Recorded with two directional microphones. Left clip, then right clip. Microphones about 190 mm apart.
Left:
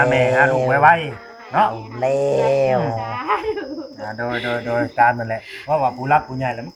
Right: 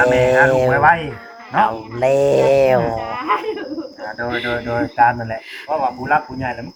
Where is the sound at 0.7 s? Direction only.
40° left (ahead or behind).